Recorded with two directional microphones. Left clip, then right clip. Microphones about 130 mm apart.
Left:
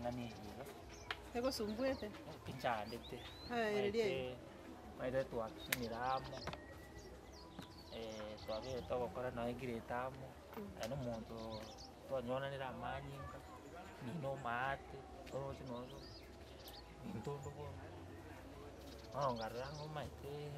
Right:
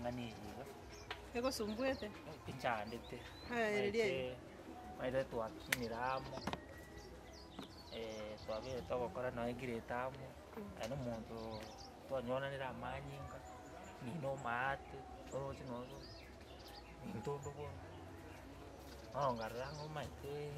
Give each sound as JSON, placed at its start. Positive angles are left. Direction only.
{"t": 1.3, "sound": "speech", "side_deg": -5}
{"t": 1.7, "sound": "speech", "side_deg": -15}
{"t": 2.4, "sound": "speech", "side_deg": 0}
{"t": 3.5, "sound": "speech", "side_deg": -5}
{"t": 4.1, "sound": "speech", "side_deg": 5}
{"t": 7.9, "sound": "speech", "side_deg": 5}
{"t": 8.8, "sound": "speech", "side_deg": 0}
{"t": 12.1, "sound": "speech", "side_deg": 0}
{"t": 14.2, "sound": "speech", "side_deg": 0}
{"t": 19.1, "sound": "speech", "side_deg": 10}